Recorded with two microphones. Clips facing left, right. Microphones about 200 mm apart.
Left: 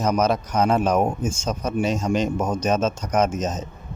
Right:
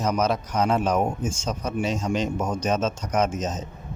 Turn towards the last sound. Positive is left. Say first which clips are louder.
# left 3 dB
turn(degrees=40)  # may be behind; listen again after turning